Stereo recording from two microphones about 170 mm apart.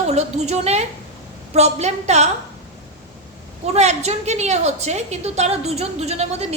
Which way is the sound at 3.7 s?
40° right (ahead or behind).